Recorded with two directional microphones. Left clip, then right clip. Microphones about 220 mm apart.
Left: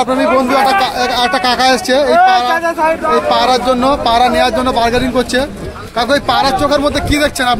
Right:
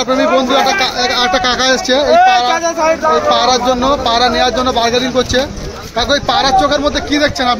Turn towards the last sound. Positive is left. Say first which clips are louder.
# even
turn(degrees=15)  # may be behind; listen again after turning